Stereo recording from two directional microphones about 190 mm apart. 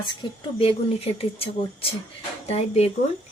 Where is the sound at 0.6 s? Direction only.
30° left (ahead or behind).